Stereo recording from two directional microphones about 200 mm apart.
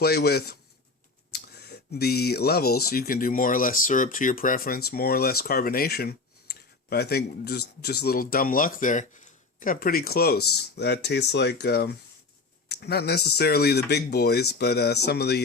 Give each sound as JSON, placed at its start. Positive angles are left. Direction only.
{"t": 0.0, "sound": "speech", "side_deg": 50}